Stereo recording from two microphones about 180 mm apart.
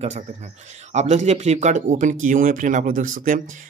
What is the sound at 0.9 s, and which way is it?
Speech, 40° right (ahead or behind).